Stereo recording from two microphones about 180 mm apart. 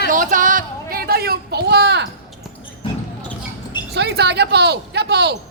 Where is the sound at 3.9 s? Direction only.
70° right (ahead or behind).